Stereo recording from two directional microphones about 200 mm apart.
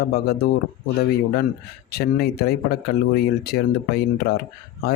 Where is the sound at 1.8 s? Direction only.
50° left (ahead or behind).